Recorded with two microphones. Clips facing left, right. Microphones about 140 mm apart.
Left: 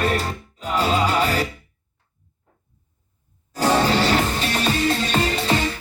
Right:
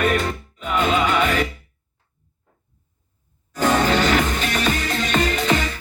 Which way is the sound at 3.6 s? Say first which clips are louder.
Even; 35° left (ahead or behind).